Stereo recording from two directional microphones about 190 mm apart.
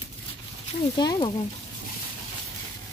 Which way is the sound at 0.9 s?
20° left (ahead or behind).